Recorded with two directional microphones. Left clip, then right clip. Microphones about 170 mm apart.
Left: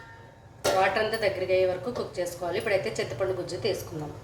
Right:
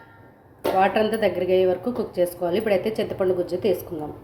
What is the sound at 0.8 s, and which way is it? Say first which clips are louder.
A woman's voice: right 6 dB; 60° right (ahead or behind).